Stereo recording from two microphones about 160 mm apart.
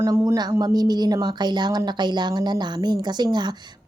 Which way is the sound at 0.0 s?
20° right (ahead or behind).